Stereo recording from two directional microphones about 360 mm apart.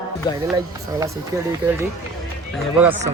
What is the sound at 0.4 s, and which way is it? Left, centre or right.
Speech, centre.